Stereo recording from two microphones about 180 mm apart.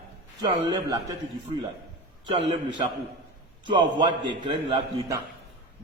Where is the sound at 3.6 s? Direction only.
25° right (ahead or behind).